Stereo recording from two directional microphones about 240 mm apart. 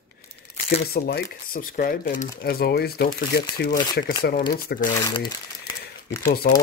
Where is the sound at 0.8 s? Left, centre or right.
Left.